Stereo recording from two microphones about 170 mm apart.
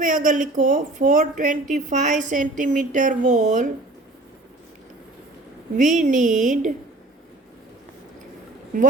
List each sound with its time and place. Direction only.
0.0 s a woman's voice: 50° right (ahead or behind)
5.7 s a woman's voice: 50° right (ahead or behind)